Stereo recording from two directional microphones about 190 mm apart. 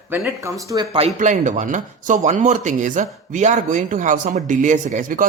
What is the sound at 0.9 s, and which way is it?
A man's voice, 35° right (ahead or behind).